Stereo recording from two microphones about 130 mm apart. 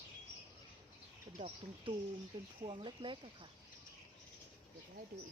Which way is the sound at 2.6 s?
40° right (ahead or behind).